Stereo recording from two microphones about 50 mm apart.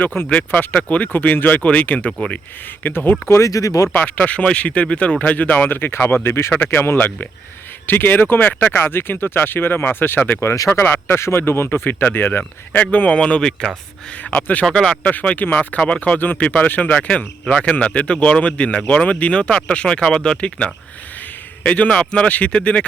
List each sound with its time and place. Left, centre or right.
0.0 s speech: left
0.3 s speech: left
3.2 s speech: left
3.9 s speech: left
11.1 s speech: left
13.1 s speech: left
14.3 s speech: left
14.6 s speech: centre
15.0 s speech: left
16.1 s speech: left
17.4 s speech: centre
17.7 s a man's voice: left